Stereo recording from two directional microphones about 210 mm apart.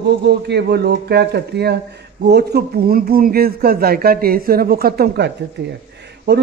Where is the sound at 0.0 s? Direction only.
50° right (ahead or behind).